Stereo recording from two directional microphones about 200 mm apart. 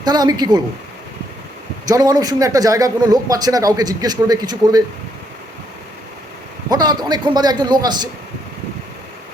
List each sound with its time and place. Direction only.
0.0 s speech: 20° right (ahead or behind)
1.9 s speech: 20° right (ahead or behind)
6.7 s speech: 20° right (ahead or behind)